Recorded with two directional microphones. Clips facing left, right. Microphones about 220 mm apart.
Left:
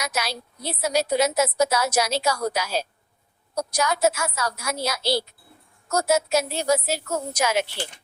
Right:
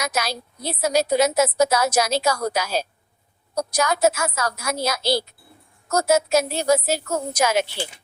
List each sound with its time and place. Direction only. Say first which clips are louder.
0.0 s a woman's voice: right 3 dB; 45° right (ahead or behind)